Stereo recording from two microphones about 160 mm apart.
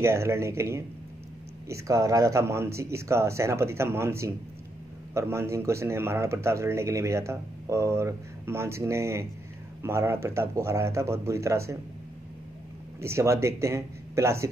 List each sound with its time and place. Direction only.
0.0 s speech: 15° right (ahead or behind)
13.0 s speech: 15° right (ahead or behind)